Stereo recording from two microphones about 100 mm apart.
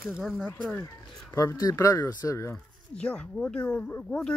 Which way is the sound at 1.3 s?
35° left (ahead or behind).